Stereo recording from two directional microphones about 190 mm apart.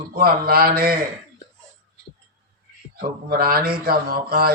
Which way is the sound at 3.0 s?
50° right (ahead or behind).